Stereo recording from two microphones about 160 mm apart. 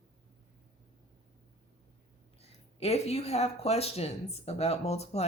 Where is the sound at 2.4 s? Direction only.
40° left (ahead or behind).